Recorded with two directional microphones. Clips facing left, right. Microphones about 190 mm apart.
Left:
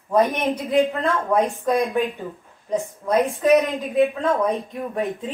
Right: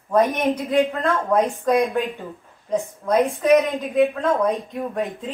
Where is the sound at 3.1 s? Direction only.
Centre (ahead or behind).